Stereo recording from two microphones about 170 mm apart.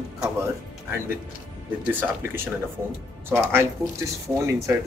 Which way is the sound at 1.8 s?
10° right (ahead or behind).